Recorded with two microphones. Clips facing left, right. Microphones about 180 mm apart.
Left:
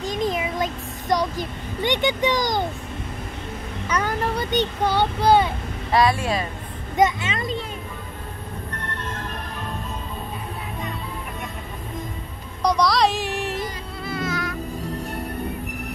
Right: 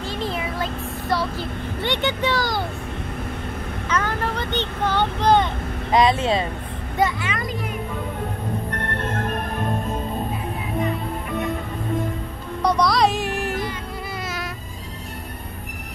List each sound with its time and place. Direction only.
0.0 s child singing: 15° left (ahead or behind)
1.1 s a child's voice: 15° left (ahead or behind)
3.9 s speech: 10° left (ahead or behind)
5.9 s speech: 20° right (ahead or behind)
7.0 s a child's voice: 25° left (ahead or behind)
8.7 s music: 60° right (ahead or behind)
12.6 s a sound: 5° right (ahead or behind)